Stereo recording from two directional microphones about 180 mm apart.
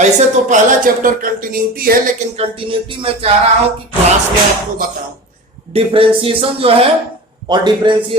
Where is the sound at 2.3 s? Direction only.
30° right (ahead or behind).